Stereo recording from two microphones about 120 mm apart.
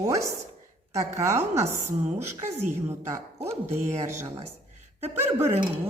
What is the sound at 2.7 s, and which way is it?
Speech, 20° right (ahead or behind).